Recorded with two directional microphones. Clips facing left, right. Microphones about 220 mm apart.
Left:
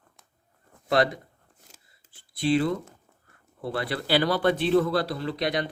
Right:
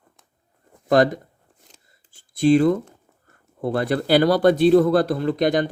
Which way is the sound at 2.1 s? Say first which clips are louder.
Right 8 dB; 45° right (ahead or behind).